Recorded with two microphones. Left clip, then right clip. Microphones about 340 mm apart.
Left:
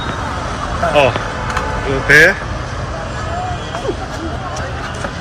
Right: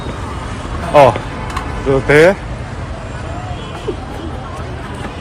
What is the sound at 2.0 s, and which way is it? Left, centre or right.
Speech, centre.